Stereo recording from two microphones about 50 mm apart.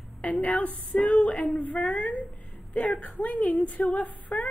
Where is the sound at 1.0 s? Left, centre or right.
Left.